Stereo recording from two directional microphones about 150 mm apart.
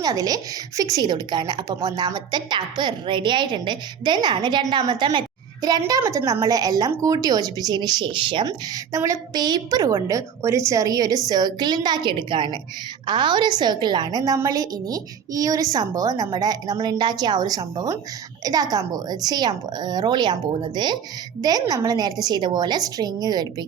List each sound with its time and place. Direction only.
0.0 s a woman's voice: 25° right (ahead or behind)